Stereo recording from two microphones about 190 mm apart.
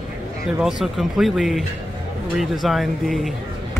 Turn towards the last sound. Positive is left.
turn(degrees=0)  # may be behind; listen again after turning